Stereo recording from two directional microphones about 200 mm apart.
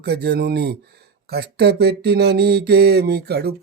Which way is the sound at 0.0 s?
55° right (ahead or behind).